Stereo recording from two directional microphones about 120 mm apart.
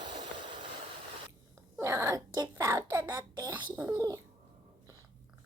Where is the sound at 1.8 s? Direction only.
25° right (ahead or behind).